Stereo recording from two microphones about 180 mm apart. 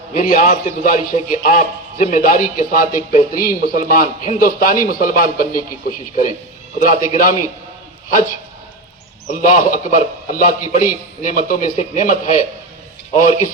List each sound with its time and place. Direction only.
0.1 s a man's voice: 50° left (ahead or behind)
6.7 s a man's voice: 45° left (ahead or behind)
9.2 s a man's voice: 45° left (ahead or behind)